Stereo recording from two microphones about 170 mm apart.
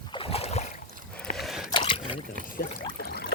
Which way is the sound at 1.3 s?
Centre (ahead or behind).